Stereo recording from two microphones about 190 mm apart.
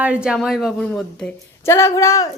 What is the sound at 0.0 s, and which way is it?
A woman's voice, 5° right (ahead or behind).